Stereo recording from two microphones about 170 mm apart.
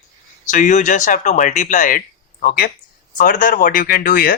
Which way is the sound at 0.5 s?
45° left (ahead or behind).